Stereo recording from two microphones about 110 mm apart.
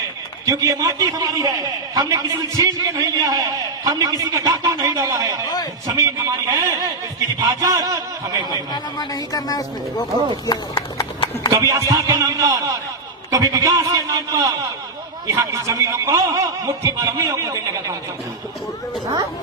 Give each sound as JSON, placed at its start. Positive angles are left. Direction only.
{"t": 0.4, "sound": "a man's voice", "side_deg": -30}
{"t": 8.5, "sound": "speech", "side_deg": 40}
{"t": 11.5, "sound": "a man's voice", "side_deg": -30}